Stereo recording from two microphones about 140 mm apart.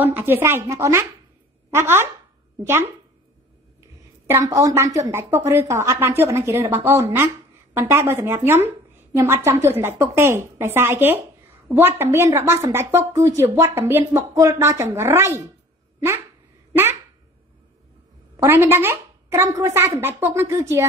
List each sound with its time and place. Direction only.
0.0 s a woman's voice: 15° right (ahead or behind)
4.3 s a woman's voice: 25° right (ahead or behind)
18.3 s a woman's voice: 15° right (ahead or behind)